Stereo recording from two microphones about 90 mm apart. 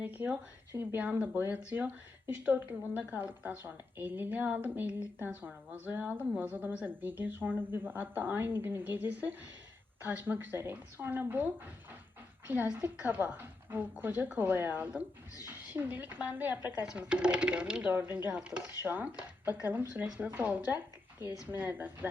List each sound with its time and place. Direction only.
0.0 s speech: 20° right (ahead or behind)
16.8 s speech: 10° right (ahead or behind)
17.9 s speech: 20° right (ahead or behind)
18.3 s speech: 10° right (ahead or behind)